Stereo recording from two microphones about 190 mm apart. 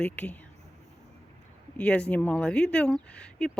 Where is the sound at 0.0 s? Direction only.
5° left (ahead or behind).